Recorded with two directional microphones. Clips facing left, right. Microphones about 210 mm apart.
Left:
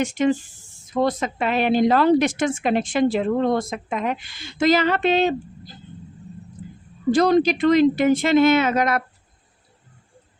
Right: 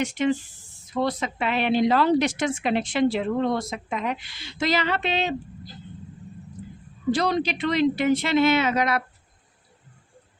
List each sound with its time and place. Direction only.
0.0 s a woman's voice: 45° left (ahead or behind)
7.1 s a woman's voice: 50° left (ahead or behind)